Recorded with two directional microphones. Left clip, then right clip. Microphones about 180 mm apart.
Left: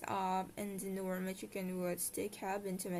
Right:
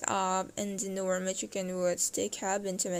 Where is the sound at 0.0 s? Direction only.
30° right (ahead or behind).